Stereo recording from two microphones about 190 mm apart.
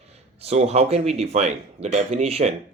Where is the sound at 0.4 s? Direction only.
35° right (ahead or behind).